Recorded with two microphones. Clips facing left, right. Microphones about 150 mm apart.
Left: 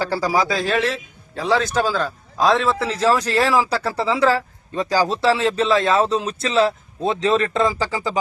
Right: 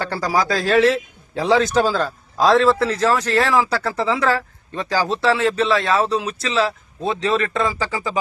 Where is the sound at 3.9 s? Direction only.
30° left (ahead or behind).